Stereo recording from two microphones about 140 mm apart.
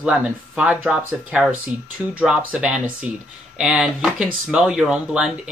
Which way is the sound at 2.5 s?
5° right (ahead or behind).